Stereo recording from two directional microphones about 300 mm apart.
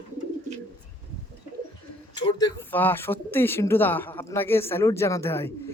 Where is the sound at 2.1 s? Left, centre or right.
Centre.